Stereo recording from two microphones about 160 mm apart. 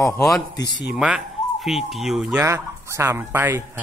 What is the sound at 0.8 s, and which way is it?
Speech, 5° right (ahead or behind).